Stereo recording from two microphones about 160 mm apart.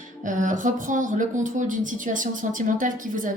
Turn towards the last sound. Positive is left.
turn(degrees=-55)  # may be behind; listen again after turning